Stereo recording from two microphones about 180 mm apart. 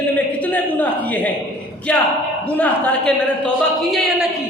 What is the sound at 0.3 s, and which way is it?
A man's voice, 10° left (ahead or behind).